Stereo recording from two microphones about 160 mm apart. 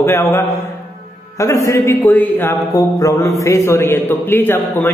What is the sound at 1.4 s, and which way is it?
A man's voice, 20° left (ahead or behind).